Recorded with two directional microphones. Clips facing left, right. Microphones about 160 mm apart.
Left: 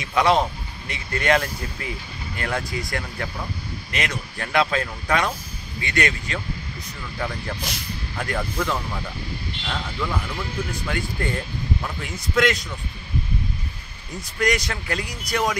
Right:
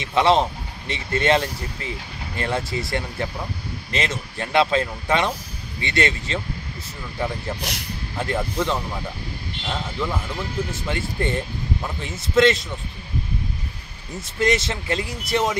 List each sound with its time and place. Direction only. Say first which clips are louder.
0.0 s speech: right 1 dB; 30° right (ahead or behind)
14.4 s speech: right 2 dB; 25° right (ahead or behind)